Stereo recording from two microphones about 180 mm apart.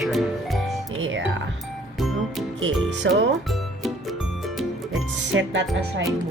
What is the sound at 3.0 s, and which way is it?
Speech, 85° right.